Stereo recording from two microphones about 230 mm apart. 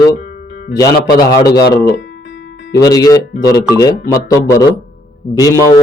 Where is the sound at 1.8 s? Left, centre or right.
Left.